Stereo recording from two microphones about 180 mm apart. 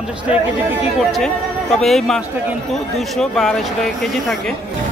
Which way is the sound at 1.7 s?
Centre (ahead or behind).